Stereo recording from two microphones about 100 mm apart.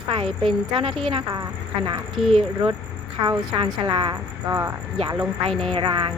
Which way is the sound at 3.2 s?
45° right (ahead or behind).